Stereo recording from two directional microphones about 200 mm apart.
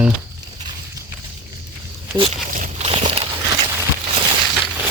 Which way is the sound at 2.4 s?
40° right (ahead or behind).